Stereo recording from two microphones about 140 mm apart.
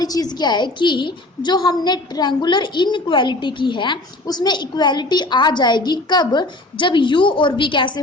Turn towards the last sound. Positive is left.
turn(degrees=35)  # may be behind; listen again after turning